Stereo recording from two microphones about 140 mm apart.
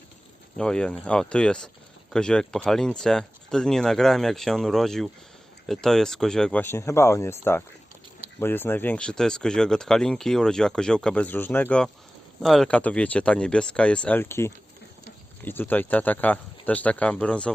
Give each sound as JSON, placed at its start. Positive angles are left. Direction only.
{"t": 0.5, "sound": "speech", "side_deg": 5}